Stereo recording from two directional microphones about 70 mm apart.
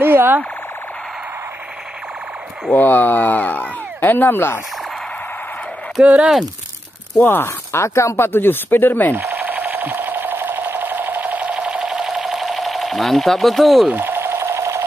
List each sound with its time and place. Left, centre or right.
0.0 s a sound: right
2.7 s speech: left
6.0 s speech: right
7.2 s speech: left
8.3 s speech: left
9.1 s sewing machine: right; by 13.8 s centre
13.9 s sewing machine: right